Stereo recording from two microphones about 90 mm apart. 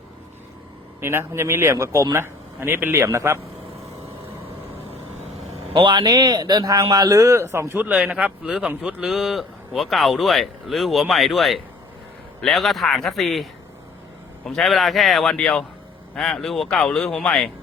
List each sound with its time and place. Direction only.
1.0 s a man's voice: 30° right (ahead or behind)
5.7 s a man's voice: 70° right (ahead or behind); by 7.8 s 30° right (ahead or behind)
7.8 s a man's voice: 15° right (ahead or behind); by 17.5 s 5° left (ahead or behind)